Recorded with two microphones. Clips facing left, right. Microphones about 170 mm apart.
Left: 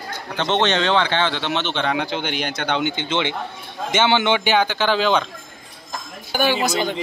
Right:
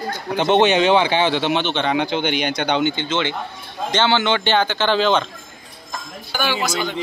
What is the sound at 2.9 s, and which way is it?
A man's voice, 15° left (ahead or behind).